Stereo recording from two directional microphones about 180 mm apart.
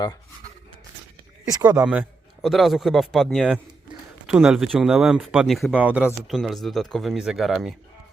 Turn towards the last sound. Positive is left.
turn(degrees=0)  # may be behind; listen again after turning